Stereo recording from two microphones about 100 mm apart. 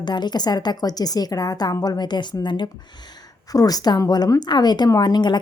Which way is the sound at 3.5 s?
40° left (ahead or behind).